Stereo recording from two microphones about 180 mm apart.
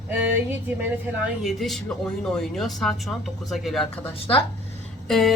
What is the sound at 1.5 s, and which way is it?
A woman's voice, centre (ahead or behind).